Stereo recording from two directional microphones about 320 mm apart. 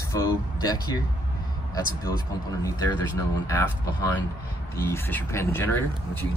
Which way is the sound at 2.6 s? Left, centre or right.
Centre.